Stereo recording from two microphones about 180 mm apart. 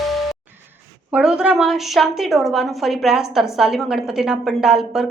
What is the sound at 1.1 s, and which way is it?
A woman's voice, 5° right (ahead or behind).